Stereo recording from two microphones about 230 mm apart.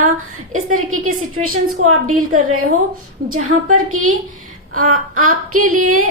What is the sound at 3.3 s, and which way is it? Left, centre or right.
A woman's voice, right.